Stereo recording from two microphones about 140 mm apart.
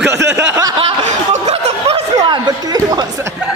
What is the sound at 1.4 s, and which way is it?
Snicker, 50° right (ahead or behind).